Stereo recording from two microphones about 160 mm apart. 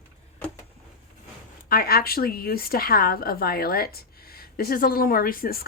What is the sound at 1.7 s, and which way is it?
A woman's voice, 70° left (ahead or behind).